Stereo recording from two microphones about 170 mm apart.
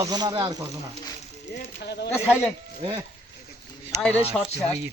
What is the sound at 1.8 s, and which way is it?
Speech, 80° left.